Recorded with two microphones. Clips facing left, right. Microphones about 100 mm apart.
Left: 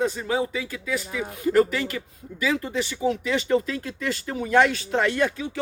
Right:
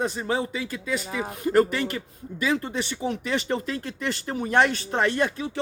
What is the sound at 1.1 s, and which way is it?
Speech, 30° right (ahead or behind).